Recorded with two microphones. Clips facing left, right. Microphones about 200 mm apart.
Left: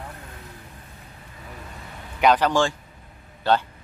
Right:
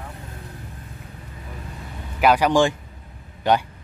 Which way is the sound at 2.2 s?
10° right (ahead or behind).